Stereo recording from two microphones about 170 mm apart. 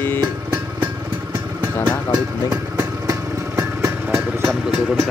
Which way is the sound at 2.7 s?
15° right (ahead or behind).